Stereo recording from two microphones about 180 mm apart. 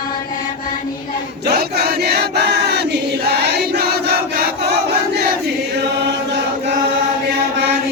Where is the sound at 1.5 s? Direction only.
60° right (ahead or behind).